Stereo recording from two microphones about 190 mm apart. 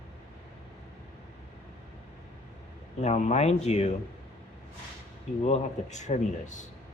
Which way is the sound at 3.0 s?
35° left (ahead or behind).